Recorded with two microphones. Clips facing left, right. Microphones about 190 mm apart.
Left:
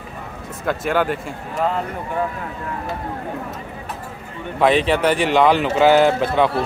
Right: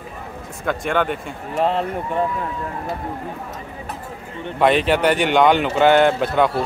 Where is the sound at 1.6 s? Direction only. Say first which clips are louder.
Right 2 dB; 30° right (ahead or behind).